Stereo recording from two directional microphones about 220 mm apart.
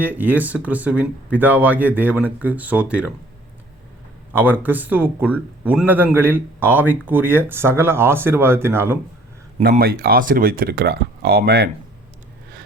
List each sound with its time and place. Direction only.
0.0 s speech: 10° right (ahead or behind)
4.3 s speech: 10° right (ahead or behind)
9.6 s speech: 45° right (ahead or behind)